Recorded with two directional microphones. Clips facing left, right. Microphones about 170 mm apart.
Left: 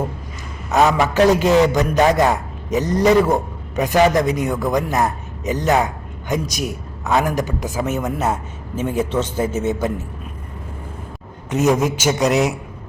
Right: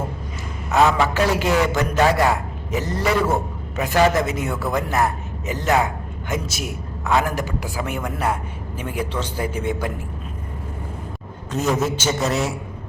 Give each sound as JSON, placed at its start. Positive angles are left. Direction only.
{"t": 0.7, "sound": "a man's voice", "side_deg": 20}
{"t": 11.5, "sound": "a man's voice", "side_deg": 15}